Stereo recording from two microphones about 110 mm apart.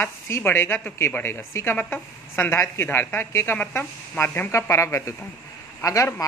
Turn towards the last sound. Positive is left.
turn(degrees=30)  # may be behind; listen again after turning